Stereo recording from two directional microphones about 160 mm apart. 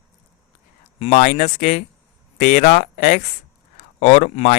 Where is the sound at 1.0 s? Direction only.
45° left (ahead or behind).